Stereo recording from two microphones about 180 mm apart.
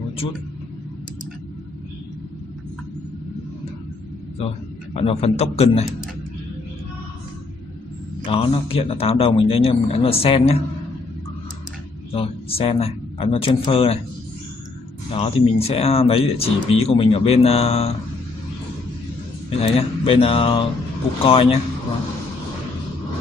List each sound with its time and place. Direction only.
4.9 s speech: 35° left (ahead or behind)
8.3 s speech: 30° left (ahead or behind)
12.1 s speech: 30° left (ahead or behind)
15.1 s speech: 35° left (ahead or behind)
19.6 s speech: 30° left (ahead or behind)